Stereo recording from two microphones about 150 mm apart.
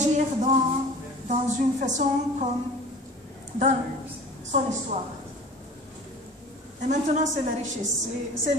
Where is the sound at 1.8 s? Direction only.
55° right (ahead or behind).